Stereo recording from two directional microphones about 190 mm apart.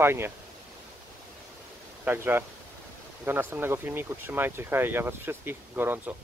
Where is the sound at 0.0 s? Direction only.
10° right (ahead or behind).